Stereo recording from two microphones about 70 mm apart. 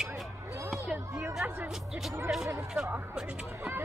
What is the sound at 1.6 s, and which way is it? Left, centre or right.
Speech, centre.